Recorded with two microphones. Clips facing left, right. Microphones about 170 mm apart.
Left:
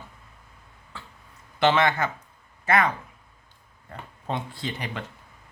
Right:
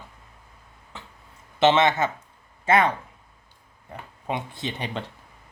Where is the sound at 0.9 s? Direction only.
20° right (ahead or behind).